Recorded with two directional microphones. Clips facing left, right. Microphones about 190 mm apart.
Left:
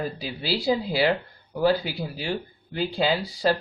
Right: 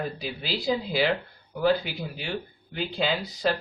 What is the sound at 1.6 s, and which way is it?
Speech, 35° left (ahead or behind).